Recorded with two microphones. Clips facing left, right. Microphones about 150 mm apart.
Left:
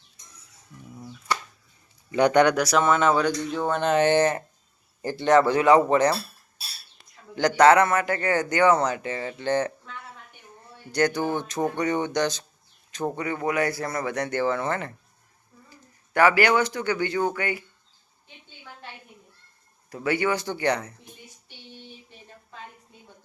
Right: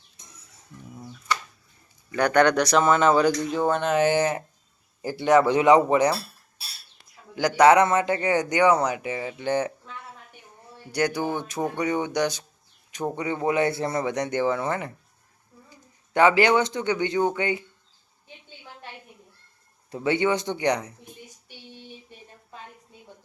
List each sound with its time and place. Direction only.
2.1 s speech: 20° left (ahead or behind); by 9.7 s 10° right (ahead or behind)
10.9 s speech: 10° right (ahead or behind)
13.1 s speech: 20° right (ahead or behind)
20.0 s speech: 20° right (ahead or behind)